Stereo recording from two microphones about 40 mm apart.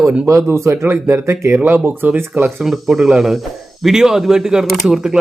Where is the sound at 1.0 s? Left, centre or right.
Right.